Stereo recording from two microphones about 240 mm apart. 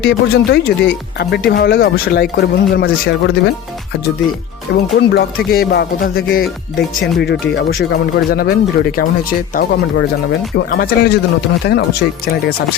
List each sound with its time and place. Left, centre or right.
0.1 s speech: left
4.7 s speech: left